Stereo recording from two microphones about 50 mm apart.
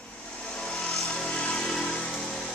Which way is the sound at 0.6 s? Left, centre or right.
Centre.